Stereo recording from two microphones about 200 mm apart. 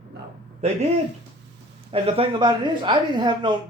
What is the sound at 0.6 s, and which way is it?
Speech, 35° right (ahead or behind).